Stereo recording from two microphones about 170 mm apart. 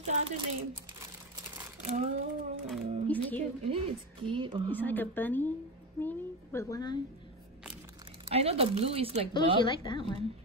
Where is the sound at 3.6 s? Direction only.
35° right (ahead or behind).